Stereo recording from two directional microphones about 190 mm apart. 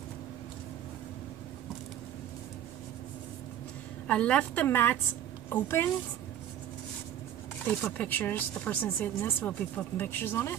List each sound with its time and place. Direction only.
4.1 s speech: 5° left (ahead or behind)
7.6 s speech: 10° left (ahead or behind)